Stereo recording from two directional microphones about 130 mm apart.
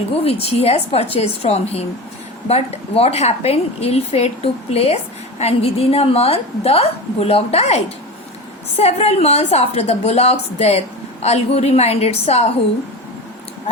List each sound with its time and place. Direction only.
0.3 s a woman's voice: 50° left (ahead or behind)
8.8 s a woman's voice: 55° left (ahead or behind)